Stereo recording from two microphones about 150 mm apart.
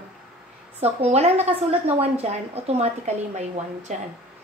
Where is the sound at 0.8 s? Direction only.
45° right (ahead or behind).